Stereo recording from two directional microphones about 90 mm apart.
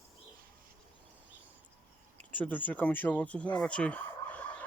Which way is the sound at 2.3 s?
20° left (ahead or behind).